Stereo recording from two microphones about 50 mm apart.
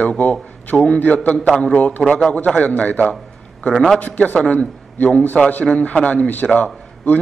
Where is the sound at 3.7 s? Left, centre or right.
Centre.